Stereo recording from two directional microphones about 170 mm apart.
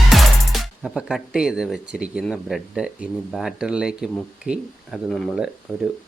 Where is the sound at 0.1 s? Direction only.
Centre (ahead or behind).